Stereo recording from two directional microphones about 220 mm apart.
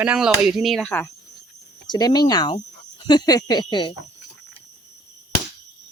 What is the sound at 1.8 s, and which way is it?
Speech, 20° left (ahead or behind).